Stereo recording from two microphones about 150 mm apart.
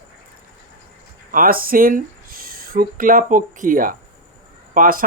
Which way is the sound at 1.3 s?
70° right (ahead or behind).